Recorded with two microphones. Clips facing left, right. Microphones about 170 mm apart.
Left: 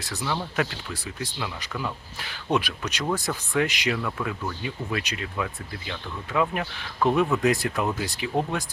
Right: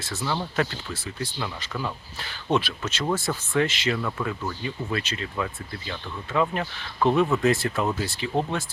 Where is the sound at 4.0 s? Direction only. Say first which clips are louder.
Right 1 dB; centre (ahead or behind).